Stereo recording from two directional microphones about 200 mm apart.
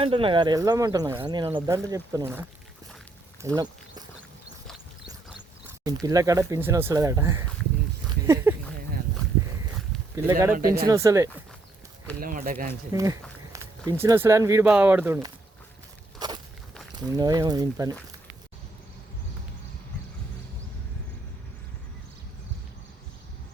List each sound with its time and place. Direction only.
0.0 s speech: 25° right (ahead or behind)
3.4 s speech: 20° right (ahead or behind)
4.6 s a sound: centre (ahead or behind)
5.8 s speech: 20° right (ahead or behind)
8.5 s a sound: 10° right (ahead or behind)
10.2 s speech: 10° right (ahead or behind)
12.2 s speech: 45° right (ahead or behind)
12.9 s speech: 15° right (ahead or behind)
16.2 s walk: 20° right (ahead or behind)
16.9 s speech: 20° right (ahead or behind)